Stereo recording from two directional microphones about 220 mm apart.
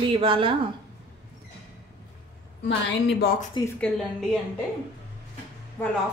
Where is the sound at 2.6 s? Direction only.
50° left (ahead or behind).